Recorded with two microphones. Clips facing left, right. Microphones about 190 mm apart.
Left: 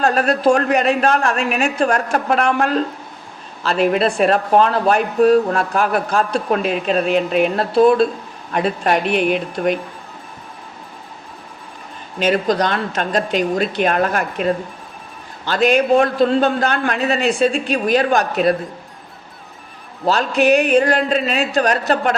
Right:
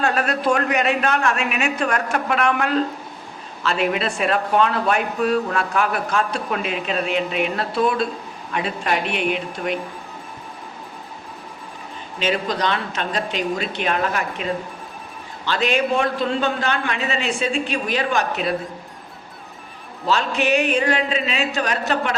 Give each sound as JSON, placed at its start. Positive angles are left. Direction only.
{"t": 0.0, "sound": "speech", "side_deg": 35}
{"t": 12.2, "sound": "speech", "side_deg": 45}
{"t": 20.4, "sound": "speech", "side_deg": 40}